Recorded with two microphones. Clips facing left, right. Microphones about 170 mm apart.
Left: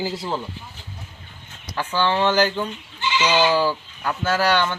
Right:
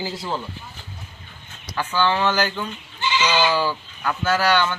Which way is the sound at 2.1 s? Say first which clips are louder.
Left 2 dB; 25° left (ahead or behind).